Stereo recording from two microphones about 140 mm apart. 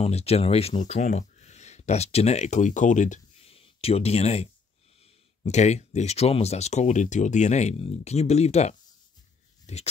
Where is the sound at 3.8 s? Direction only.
45° left (ahead or behind).